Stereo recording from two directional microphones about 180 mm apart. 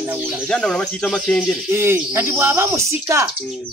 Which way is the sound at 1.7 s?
15° right (ahead or behind).